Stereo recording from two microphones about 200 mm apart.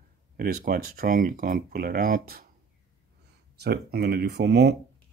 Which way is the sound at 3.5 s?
55° right (ahead or behind).